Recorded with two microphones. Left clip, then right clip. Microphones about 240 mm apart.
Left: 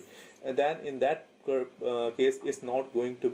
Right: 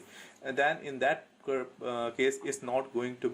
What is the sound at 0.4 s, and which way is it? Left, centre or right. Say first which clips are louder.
Speech: even; right.